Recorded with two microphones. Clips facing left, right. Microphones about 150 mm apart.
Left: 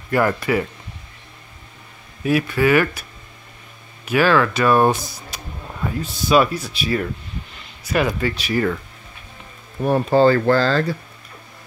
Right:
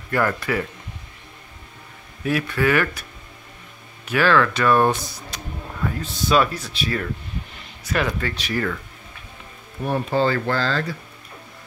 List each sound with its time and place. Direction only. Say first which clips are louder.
0.1 s speech: left 4 dB; 15° left (ahead or behind)
2.2 s speech: left 3 dB; 10° left (ahead or behind)
9.8 s speech: left 6 dB; 40° left (ahead or behind)